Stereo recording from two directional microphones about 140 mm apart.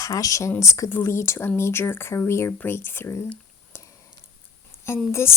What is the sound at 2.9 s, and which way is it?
Whispering, 15° left (ahead or behind).